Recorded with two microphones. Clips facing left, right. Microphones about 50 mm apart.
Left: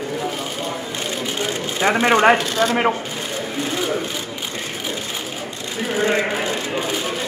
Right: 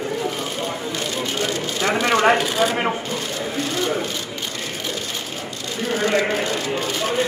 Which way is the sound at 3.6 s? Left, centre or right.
Centre.